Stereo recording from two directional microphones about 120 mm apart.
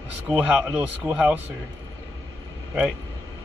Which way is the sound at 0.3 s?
10° right (ahead or behind).